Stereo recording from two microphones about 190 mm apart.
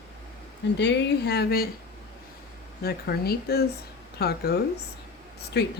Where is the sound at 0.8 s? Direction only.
65° left (ahead or behind).